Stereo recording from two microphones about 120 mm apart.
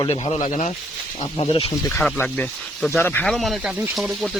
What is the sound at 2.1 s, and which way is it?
Speech, 15° left (ahead or behind).